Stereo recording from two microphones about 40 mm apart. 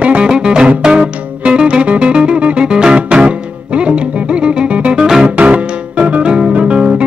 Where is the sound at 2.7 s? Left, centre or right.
Right.